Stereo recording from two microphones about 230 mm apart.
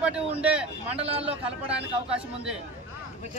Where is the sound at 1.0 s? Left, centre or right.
Right.